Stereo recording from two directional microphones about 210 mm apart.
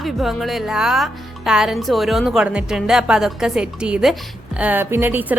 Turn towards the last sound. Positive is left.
turn(degrees=-10)  # may be behind; listen again after turning